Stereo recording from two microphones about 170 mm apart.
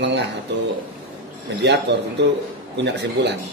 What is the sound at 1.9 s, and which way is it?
Speech, 90° right.